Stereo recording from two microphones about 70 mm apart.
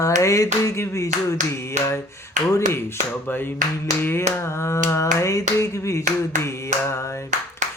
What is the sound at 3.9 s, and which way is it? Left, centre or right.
Finger snapping, left.